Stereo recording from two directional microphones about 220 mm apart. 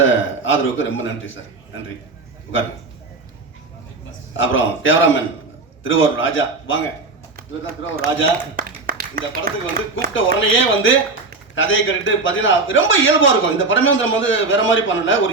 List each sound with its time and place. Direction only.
0.0 s speech: 60° left (ahead or behind)
4.4 s speech: 60° left (ahead or behind)
7.3 s speech: 40° right (ahead or behind)
8.5 s a sound: 40° right (ahead or behind)
9.9 s speech: 60° left (ahead or behind)